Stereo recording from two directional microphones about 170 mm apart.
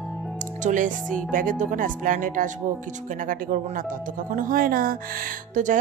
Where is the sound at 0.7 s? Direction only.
50° right (ahead or behind).